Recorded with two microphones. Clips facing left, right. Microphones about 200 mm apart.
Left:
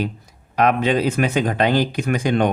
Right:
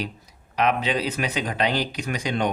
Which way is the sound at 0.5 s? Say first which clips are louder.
Left 5 dB; 50° left (ahead or behind).